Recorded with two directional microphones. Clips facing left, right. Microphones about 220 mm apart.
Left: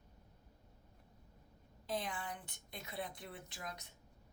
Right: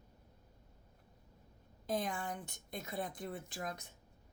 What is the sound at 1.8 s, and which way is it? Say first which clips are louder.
A woman's voice: right 4 dB; 45° right (ahead or behind).